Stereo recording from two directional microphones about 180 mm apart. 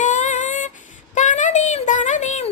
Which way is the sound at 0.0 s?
45° left (ahead or behind).